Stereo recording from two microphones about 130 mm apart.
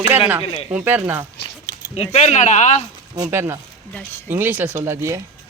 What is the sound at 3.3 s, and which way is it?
Speech, 20° right (ahead or behind).